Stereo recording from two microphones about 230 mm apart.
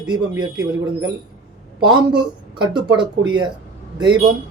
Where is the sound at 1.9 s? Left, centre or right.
Centre.